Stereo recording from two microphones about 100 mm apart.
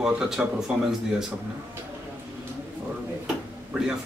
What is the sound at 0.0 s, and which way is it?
Speech, 5° right (ahead or behind).